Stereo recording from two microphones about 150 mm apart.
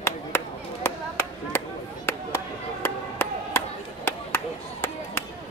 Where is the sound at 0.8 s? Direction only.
15° left (ahead or behind).